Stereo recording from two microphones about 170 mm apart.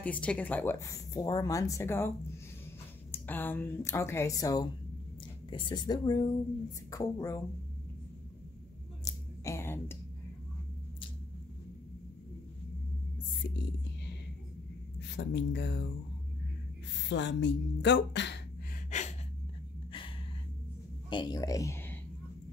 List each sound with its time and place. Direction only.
0.0 s speech: 5° left (ahead or behind)
3.1 s speech: 10° left (ahead or behind)
9.0 s a sound: 20° left (ahead or behind)
15.0 s speech: 90° left
17.1 s speech: 90° left
18.9 s gasp: 45° left (ahead or behind)
21.1 s a woman's voice: 25° left (ahead or behind)